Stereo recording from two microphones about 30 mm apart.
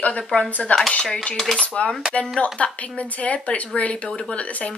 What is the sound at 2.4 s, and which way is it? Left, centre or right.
Dishes, left.